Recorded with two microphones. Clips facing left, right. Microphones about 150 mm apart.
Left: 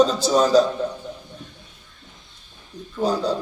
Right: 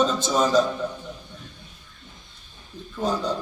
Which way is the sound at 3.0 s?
30° left (ahead or behind).